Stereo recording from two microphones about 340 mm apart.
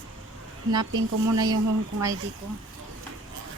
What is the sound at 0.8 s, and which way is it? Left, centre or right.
Speech, right.